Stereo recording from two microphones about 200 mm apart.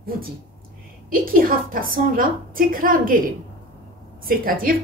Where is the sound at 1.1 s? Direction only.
45° right (ahead or behind).